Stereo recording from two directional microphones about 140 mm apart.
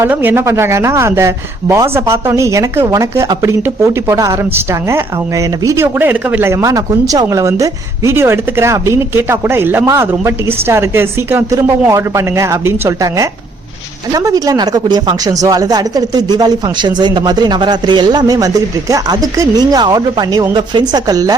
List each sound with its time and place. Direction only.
0.0 s speech: 15° right (ahead or behind)